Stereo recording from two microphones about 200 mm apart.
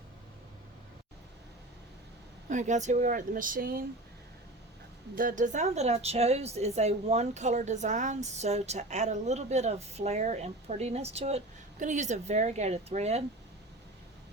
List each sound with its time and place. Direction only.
2.5 s a woman's voice: 35° right (ahead or behind)
5.1 s a woman's voice: 40° right (ahead or behind)